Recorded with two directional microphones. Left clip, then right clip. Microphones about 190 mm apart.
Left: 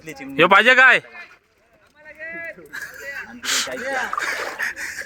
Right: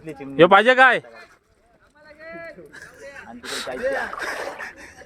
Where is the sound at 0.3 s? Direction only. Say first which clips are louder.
Even; 15° right (ahead or behind).